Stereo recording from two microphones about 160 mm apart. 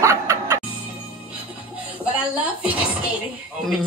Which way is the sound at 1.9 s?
10° right (ahead or behind).